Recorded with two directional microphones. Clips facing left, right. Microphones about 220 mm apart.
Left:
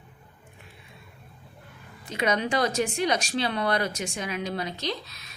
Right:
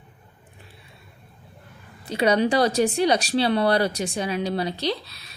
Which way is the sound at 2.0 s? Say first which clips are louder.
Right 6 dB; 35° right (ahead or behind).